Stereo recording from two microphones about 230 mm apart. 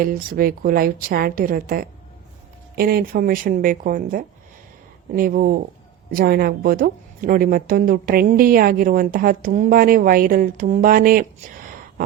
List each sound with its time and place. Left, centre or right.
0.0 s a woman's voice: right